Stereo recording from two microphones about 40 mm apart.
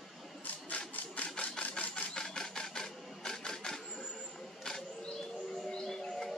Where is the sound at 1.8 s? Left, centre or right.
Left.